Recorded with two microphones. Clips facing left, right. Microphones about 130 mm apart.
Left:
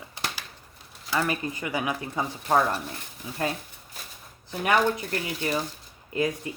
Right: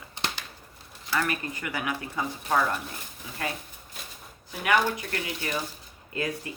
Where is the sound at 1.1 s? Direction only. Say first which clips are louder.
Left 2 dB; 25° left (ahead or behind).